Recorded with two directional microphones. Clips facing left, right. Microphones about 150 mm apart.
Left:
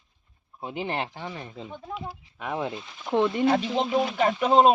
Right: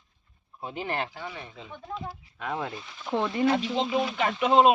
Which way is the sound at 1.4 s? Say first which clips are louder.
Left 4 dB; 35° left (ahead or behind).